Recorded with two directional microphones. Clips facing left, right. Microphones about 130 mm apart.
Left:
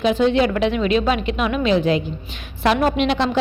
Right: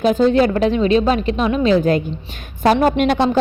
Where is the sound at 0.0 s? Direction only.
40° right (ahead or behind).